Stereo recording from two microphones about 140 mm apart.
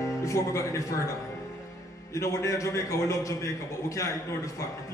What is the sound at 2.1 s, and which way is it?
A man's voice, 20° left (ahead or behind).